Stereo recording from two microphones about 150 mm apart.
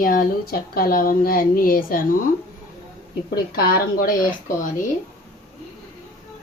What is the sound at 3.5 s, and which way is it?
Speech, 90° left.